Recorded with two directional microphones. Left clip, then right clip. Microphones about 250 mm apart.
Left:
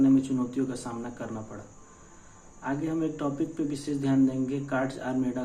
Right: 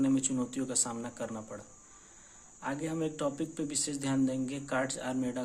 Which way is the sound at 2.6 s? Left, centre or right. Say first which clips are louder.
Left 5 dB; right.